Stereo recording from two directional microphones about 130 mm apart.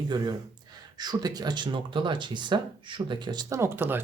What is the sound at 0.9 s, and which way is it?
Speech, 30° right (ahead or behind).